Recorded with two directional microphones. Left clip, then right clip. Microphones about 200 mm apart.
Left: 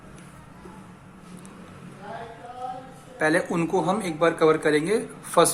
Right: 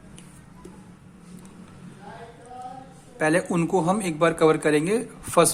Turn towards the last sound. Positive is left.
turn(degrees=-35)  # may be behind; listen again after turning